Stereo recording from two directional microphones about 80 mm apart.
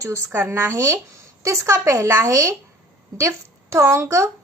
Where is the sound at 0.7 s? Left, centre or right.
Right.